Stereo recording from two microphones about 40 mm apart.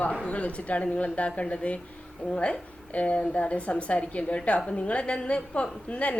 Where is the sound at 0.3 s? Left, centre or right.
Left.